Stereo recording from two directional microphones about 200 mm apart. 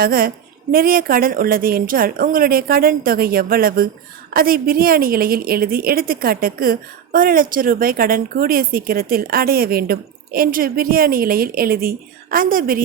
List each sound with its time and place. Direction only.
0.0 s a woman's voice: 45° right (ahead or behind)